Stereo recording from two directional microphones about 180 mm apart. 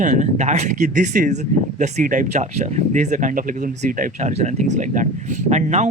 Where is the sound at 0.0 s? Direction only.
40° right (ahead or behind).